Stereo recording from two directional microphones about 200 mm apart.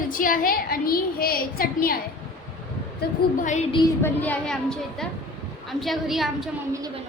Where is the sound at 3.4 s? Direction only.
35° left (ahead or behind).